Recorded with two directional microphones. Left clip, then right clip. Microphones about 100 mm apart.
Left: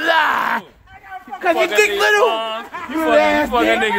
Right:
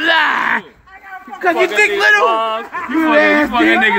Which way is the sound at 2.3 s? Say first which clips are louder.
Right 5 dB; 35° left (ahead or behind).